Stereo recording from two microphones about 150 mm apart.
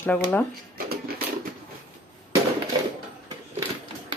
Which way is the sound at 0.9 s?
90° right.